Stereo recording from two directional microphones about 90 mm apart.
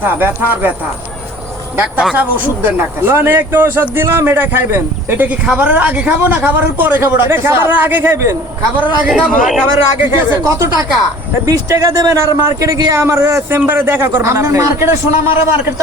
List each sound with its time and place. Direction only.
0.0 s a man's voice: 20° right (ahead or behind)
1.7 s a man's voice: 15° right (ahead or behind)
9.0 s a man's voice: 5° right (ahead or behind)
9.7 s a man's voice: 25° right (ahead or behind)
10.5 s a man's voice: 35° right (ahead or behind)